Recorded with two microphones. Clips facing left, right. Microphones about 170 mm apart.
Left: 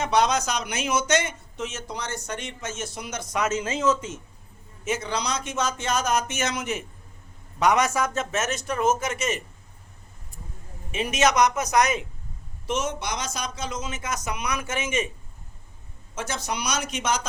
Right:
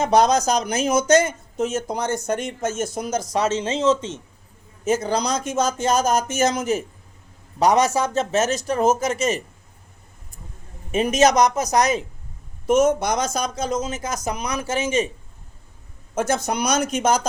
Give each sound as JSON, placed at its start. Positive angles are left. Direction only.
{"t": 0.0, "sound": "speech", "side_deg": -40}
{"t": 4.9, "sound": "speech", "side_deg": -45}
{"t": 10.9, "sound": "speech", "side_deg": -40}
{"t": 12.6, "sound": "speech", "side_deg": -50}
{"t": 16.1, "sound": "speech", "side_deg": -50}